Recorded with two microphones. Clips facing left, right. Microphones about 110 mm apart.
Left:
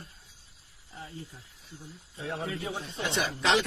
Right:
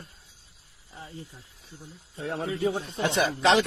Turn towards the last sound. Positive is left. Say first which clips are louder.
# right 5 dB
turn(degrees=-40)  # may be behind; listen again after turning